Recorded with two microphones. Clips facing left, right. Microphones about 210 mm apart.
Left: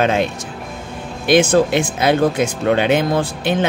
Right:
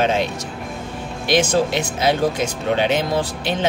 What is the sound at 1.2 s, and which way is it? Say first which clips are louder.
Speech: left 5 dB; 55° left (ahead or behind).